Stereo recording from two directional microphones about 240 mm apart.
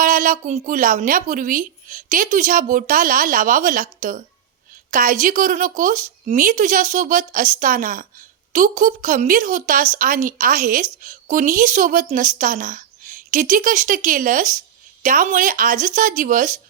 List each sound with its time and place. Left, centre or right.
0.0 s a woman's voice: right